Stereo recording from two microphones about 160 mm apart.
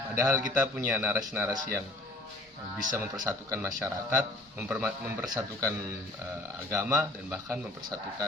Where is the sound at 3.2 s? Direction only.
20° right (ahead or behind).